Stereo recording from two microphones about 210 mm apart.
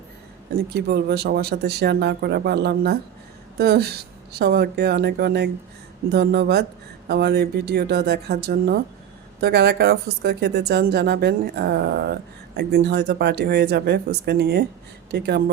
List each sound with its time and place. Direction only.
0.5 s speech: 50° right (ahead or behind)